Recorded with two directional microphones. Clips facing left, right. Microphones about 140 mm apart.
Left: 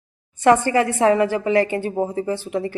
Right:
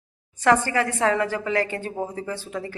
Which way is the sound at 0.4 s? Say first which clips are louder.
Left 4 dB; 20° left (ahead or behind).